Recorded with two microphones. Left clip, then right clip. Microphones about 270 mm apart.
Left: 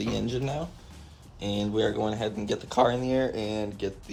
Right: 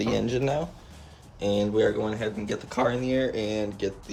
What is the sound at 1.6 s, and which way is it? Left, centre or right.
Speech, centre.